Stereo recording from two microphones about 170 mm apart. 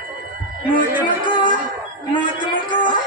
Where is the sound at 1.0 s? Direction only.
30° left (ahead or behind).